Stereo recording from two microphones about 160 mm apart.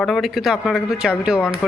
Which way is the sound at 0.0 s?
Centre (ahead or behind).